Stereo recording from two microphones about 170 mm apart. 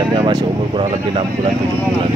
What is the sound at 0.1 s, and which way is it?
Speech, 30° right (ahead or behind).